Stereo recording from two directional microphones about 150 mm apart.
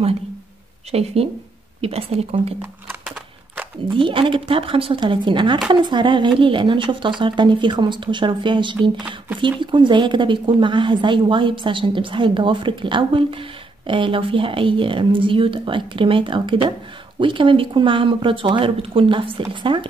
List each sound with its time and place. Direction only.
0.9 s speech: 40° right (ahead or behind)
3.9 s a woman's voice: 35° right (ahead or behind)
8.9 s speech: 10° right (ahead or behind)
9.4 s a woman's voice: 30° right (ahead or behind)